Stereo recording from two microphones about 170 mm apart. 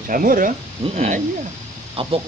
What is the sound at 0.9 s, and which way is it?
Speech, 40° right (ahead or behind).